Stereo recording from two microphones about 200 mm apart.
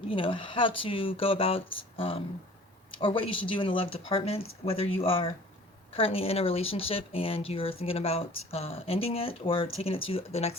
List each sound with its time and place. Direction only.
0.1 s speech: 25° left (ahead or behind)